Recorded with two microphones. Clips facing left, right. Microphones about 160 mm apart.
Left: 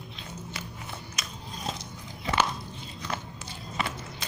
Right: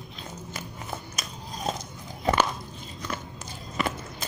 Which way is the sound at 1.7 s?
45° right (ahead or behind).